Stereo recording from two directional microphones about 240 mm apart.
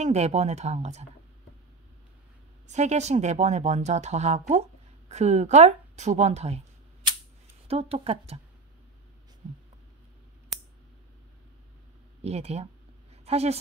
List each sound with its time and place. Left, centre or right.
0.0 s speech: right
2.6 s speech: right
7.6 s speech: right
12.2 s speech: right
13.1 s a sound: right